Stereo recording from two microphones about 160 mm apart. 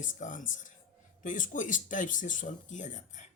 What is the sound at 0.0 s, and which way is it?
Speech, 55° left (ahead or behind).